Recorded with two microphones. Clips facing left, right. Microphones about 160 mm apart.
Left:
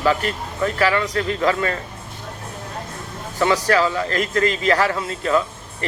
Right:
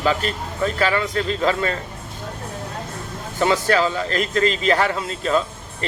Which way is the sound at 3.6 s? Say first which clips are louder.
Left 1 dB; 25° right (ahead or behind).